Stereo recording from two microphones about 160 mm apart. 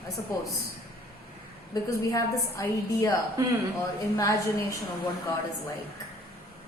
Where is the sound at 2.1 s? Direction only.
20° left (ahead or behind).